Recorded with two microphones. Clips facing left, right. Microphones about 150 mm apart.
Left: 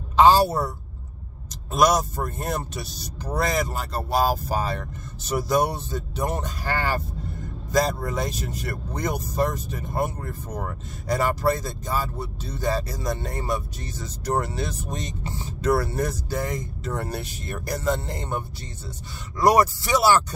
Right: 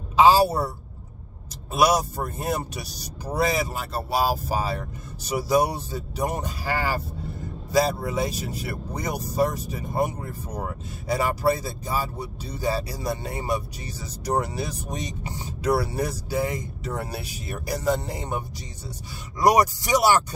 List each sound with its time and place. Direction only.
0.1 s speech: 5° right (ahead or behind)
1.7 s speech: 10° right (ahead or behind)
19.4 s speech: 15° right (ahead or behind)